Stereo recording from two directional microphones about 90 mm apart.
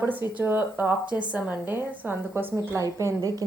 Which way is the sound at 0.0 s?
20° right (ahead or behind).